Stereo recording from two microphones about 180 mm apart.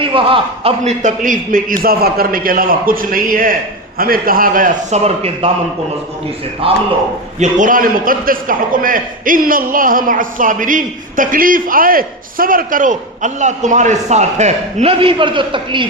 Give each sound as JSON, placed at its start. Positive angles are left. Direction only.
{"t": 0.0, "sound": "a man's voice", "side_deg": -30}
{"t": 6.6, "sound": "a man's voice", "side_deg": -30}
{"t": 7.3, "sound": "a man's voice", "side_deg": -45}